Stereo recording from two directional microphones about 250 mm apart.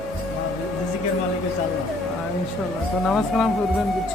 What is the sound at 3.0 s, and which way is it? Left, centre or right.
Speech, centre.